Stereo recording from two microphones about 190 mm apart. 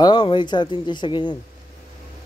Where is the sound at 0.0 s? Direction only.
25° left (ahead or behind).